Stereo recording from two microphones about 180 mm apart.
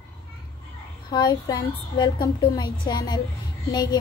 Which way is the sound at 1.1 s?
25° left (ahead or behind).